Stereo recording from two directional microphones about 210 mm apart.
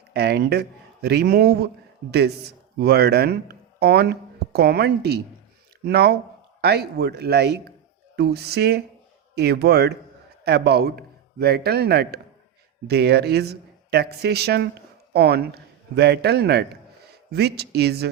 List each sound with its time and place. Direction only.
0.1 s a man's voice: 50° right (ahead or behind)